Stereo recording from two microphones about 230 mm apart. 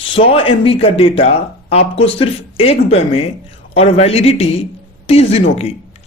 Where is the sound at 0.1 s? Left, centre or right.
Left.